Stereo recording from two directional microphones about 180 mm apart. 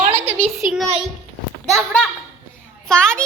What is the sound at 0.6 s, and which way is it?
A child's voice, centre (ahead or behind).